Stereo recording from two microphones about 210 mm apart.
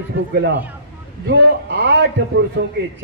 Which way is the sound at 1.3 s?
55° right (ahead or behind).